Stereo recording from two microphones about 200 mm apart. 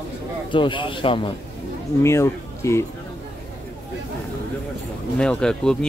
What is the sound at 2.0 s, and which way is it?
Speech, 15° left (ahead or behind).